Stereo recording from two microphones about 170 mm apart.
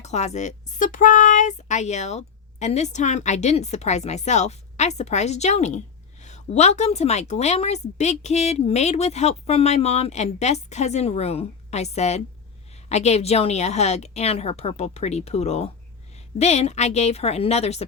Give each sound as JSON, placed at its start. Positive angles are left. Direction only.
{"t": 0.0, "sound": "a woman's voice", "side_deg": 40}